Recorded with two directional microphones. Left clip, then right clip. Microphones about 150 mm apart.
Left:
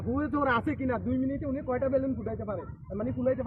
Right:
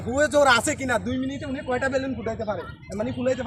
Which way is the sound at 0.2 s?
20° right (ahead or behind).